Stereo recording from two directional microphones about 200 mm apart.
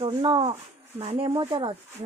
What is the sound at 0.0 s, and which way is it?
A woman's voice, 25° right (ahead or behind).